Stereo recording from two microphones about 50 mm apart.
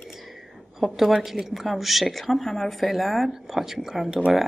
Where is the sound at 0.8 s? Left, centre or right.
Centre.